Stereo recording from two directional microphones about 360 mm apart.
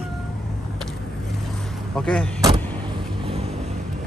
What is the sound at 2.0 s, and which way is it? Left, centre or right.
Speech, centre.